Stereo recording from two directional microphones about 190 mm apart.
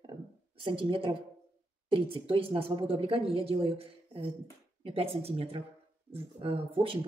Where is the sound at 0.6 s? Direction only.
30° right (ahead or behind).